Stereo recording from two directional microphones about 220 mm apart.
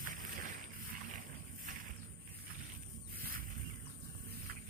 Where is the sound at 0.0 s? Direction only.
40° right (ahead or behind).